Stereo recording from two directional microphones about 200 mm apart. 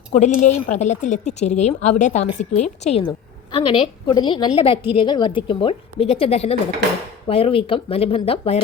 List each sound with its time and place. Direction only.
0.3 s a woman's voice: 35° left (ahead or behind)